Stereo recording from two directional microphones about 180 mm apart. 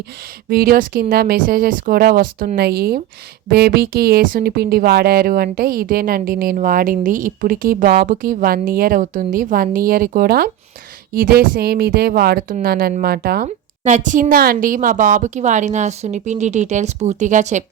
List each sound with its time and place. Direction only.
0.5 s a woman's voice: 55° right (ahead or behind)